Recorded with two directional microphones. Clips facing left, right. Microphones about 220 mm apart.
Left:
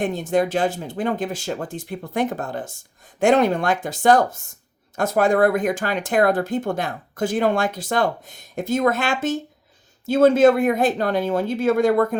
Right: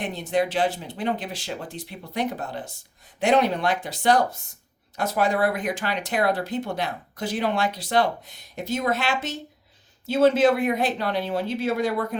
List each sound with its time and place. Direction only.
0.0 s speech: 45° left (ahead or behind)